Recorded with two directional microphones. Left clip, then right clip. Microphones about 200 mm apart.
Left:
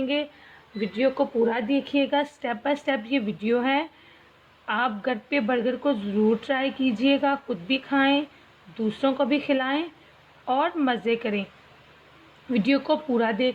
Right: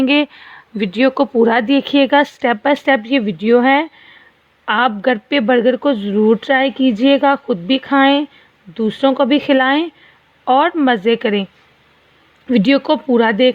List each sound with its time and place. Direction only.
0.0 s speech: 55° right (ahead or behind)
12.5 s speech: 45° right (ahead or behind)